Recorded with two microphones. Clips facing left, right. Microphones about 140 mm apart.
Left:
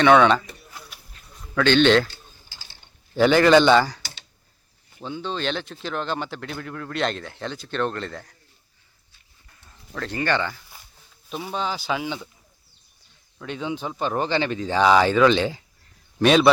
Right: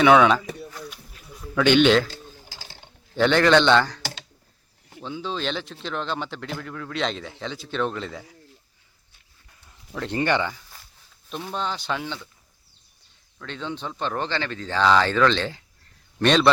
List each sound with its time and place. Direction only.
0.0 s speech: 5° right (ahead or behind)
1.1 s a sound: 10° right (ahead or behind)
2.0 s typing: 90° right
3.2 s a man's voice: 5° left (ahead or behind)
9.9 s speech: 20° right (ahead or behind)
11.3 s speech: 5° left (ahead or behind)
13.4 s a man's voice: 10° left (ahead or behind)